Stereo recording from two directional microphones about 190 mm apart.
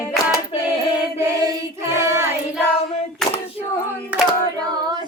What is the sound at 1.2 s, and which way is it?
Child singing, 15° right (ahead or behind).